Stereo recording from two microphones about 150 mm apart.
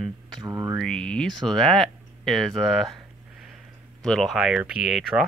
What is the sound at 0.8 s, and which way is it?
Speech, 5° left (ahead or behind).